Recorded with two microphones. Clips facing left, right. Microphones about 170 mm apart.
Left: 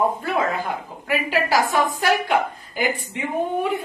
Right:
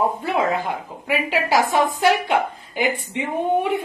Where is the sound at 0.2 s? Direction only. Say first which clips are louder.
Right 2 dB; 25° right (ahead or behind).